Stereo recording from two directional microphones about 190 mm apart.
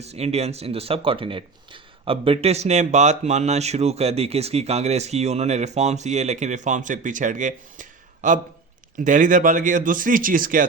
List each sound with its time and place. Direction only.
0.0 s speech: 35° right (ahead or behind)